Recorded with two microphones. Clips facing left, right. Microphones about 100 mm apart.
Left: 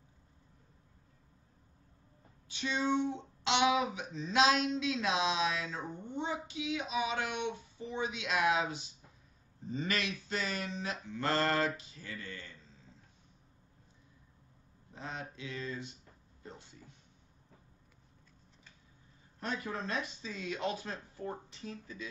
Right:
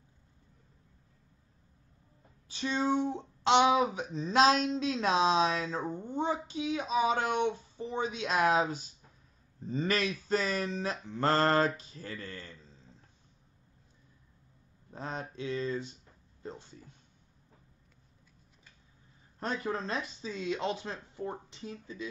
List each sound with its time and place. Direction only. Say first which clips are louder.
2.4 s speech: right 3 dB; 35° right (ahead or behind)
14.9 s speech: right 4 dB; 40° right (ahead or behind)
19.4 s speech: right 4 dB; 35° right (ahead or behind)